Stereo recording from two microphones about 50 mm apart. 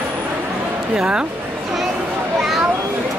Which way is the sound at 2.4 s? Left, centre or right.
Centre.